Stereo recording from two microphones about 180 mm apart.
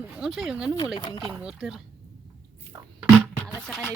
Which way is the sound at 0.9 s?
20° left (ahead or behind).